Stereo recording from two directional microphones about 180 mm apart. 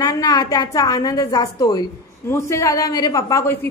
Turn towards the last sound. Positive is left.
turn(degrees=15)  # may be behind; listen again after turning